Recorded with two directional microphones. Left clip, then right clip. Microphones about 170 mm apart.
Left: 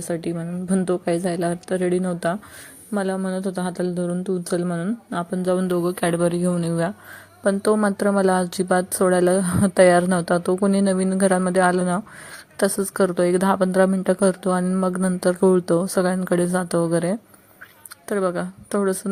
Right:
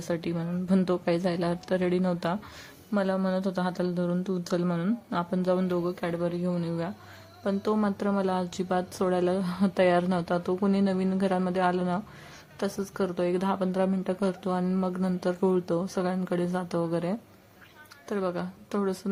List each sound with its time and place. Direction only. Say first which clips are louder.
0.0 s a woman's voice: left 5 dB; 15° left (ahead or behind)